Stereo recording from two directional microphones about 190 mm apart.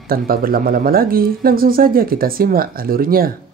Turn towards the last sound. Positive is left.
turn(degrees=-50)  # may be behind; listen again after turning